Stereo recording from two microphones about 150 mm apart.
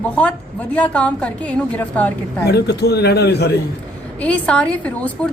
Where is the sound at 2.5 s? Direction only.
90° left.